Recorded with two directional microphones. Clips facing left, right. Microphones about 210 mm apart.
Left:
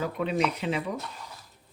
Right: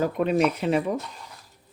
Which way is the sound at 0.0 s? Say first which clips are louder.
Right 6 dB; 50° right (ahead or behind).